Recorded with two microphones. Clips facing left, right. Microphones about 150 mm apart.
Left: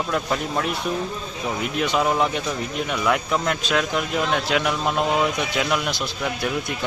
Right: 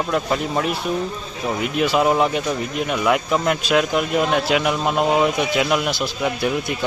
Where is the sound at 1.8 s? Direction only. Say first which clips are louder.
Right 4 dB; 5° right (ahead or behind).